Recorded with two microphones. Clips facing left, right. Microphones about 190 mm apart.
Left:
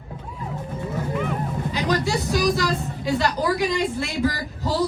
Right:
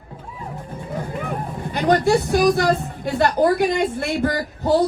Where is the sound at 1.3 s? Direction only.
55° right (ahead or behind).